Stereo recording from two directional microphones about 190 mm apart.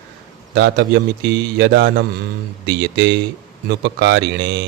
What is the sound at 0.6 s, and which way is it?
Speech, 60° right (ahead or behind).